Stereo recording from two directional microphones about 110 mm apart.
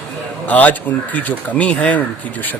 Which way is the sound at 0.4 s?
15° left (ahead or behind).